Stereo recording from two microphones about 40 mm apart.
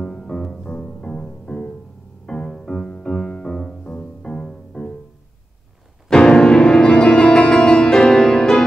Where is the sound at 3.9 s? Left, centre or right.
Left.